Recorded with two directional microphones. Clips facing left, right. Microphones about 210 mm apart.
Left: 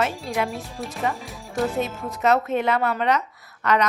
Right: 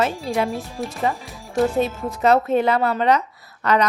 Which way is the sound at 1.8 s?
30° right (ahead or behind).